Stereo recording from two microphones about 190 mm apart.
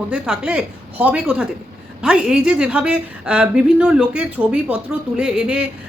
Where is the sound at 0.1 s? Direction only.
5° right (ahead or behind).